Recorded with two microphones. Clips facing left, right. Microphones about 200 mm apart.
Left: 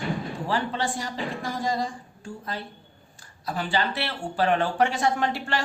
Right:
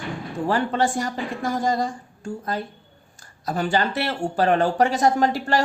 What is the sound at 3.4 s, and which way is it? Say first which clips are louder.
A woman's voice: right 4 dB; 45° right (ahead or behind).